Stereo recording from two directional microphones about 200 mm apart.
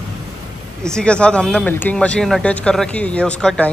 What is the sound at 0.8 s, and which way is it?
Speech, 5° left (ahead or behind).